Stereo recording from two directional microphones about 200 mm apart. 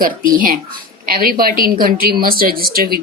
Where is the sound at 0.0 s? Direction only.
45° right (ahead or behind).